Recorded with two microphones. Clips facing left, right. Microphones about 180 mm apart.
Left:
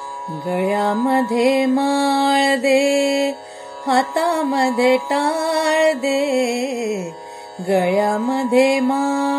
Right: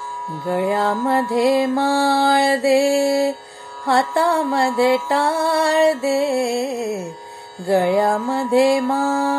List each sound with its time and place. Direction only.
0.3 s music: 20° left (ahead or behind)